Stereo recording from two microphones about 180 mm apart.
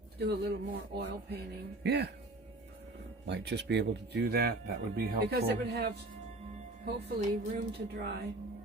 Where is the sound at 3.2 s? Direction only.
70° right (ahead or behind).